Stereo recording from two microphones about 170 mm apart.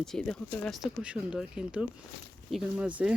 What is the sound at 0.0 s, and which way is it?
Speech, 5° left (ahead or behind).